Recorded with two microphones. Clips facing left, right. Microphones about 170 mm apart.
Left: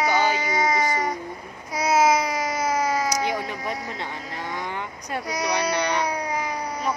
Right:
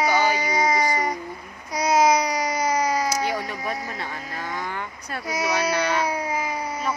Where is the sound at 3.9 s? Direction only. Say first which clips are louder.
Even; 20° left (ahead or behind).